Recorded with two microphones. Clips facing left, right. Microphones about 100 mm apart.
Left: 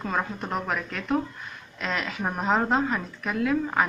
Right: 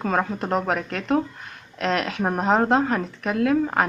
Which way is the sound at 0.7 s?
65° right (ahead or behind).